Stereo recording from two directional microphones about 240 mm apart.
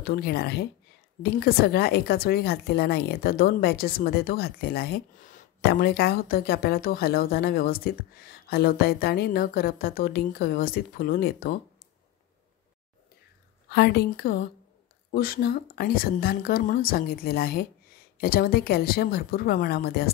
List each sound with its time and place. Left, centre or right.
0.0 s a woman's voice: left
13.7 s a woman's voice: left